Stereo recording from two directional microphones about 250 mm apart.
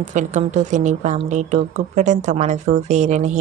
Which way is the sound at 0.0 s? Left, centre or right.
Right.